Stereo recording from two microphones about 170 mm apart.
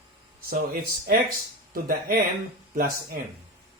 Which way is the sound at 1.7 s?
60° right (ahead or behind).